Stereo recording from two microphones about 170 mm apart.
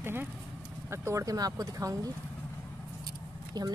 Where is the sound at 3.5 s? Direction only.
25° right (ahead or behind).